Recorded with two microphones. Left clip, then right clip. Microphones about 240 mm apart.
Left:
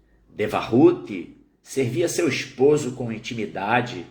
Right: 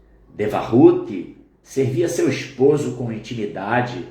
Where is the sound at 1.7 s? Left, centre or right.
Centre.